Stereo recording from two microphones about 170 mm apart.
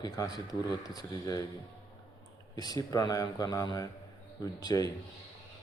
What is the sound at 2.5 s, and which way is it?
Speech, 25° left (ahead or behind).